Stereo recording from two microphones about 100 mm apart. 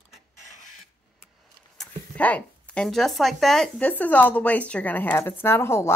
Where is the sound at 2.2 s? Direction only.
15° left (ahead or behind).